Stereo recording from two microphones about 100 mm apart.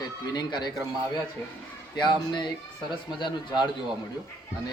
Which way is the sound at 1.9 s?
50° left (ahead or behind).